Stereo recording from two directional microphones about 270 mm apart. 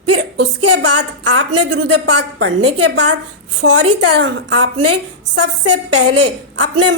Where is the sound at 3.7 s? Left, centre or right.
Right.